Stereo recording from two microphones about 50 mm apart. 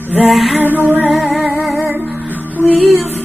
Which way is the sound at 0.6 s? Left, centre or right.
Right.